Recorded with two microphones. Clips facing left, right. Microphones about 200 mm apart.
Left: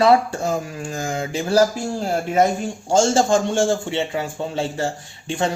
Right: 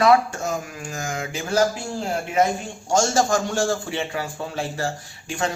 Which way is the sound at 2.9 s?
30° left (ahead or behind).